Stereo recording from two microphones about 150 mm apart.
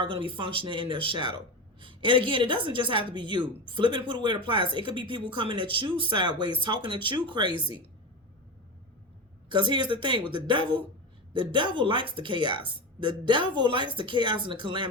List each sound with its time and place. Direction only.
0.0 s a woman's voice: 35° right (ahead or behind)
9.5 s a woman's voice: 30° right (ahead or behind)